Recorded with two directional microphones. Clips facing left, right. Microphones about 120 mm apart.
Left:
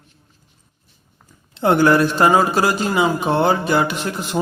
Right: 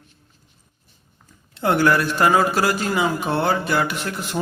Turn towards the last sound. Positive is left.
turn(degrees=20)  # may be behind; listen again after turning